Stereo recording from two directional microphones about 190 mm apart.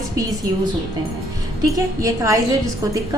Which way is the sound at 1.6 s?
15° right (ahead or behind).